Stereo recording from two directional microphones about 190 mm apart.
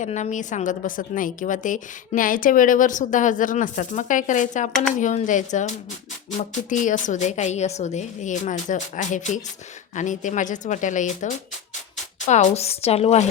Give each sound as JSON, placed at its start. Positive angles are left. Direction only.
{"t": 0.0, "sound": "a woman's voice", "side_deg": 40}
{"t": 12.3, "sound": "a woman's voice", "side_deg": 40}